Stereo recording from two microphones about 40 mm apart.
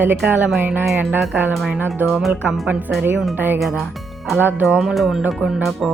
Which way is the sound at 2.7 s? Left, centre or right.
Right.